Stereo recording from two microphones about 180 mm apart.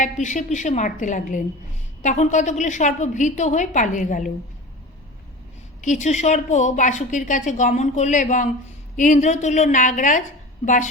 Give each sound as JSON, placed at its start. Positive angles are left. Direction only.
{"t": 0.0, "sound": "a woman's voice", "side_deg": 45}
{"t": 5.8, "sound": "a woman's voice", "side_deg": 40}